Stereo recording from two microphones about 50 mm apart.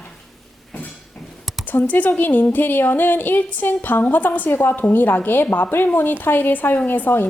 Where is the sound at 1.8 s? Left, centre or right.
Left.